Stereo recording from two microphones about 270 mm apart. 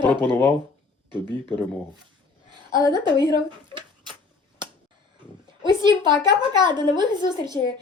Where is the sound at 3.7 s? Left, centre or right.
Centre.